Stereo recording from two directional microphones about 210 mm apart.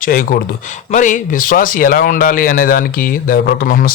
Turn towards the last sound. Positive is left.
turn(degrees=45)  # may be behind; listen again after turning